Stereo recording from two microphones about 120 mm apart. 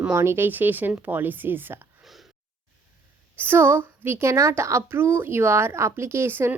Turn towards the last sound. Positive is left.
turn(degrees=-20)  # may be behind; listen again after turning